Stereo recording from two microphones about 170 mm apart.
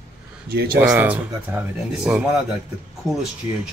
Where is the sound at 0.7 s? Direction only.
10° right (ahead or behind).